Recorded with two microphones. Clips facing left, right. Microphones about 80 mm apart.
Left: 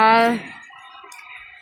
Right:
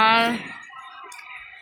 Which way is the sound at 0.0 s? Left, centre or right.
Centre.